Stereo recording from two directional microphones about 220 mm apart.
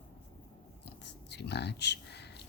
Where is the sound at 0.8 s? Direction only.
50° left (ahead or behind).